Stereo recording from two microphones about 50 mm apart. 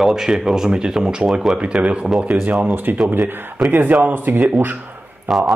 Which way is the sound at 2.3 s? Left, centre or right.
Right.